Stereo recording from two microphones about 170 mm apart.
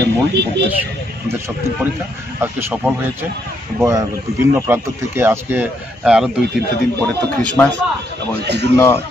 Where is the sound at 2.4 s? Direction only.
15° right (ahead or behind).